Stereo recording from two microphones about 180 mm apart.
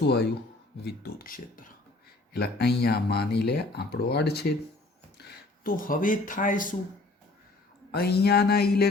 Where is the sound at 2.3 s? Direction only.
65° left (ahead or behind).